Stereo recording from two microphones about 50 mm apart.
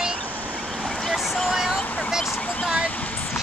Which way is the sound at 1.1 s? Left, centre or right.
Centre.